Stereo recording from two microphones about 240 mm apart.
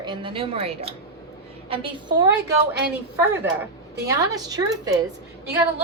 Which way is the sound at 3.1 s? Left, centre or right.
Centre.